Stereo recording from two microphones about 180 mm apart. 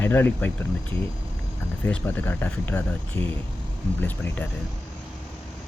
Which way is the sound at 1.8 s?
10° left (ahead or behind).